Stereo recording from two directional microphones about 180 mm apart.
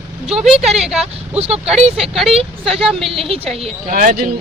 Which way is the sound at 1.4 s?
35° right (ahead or behind).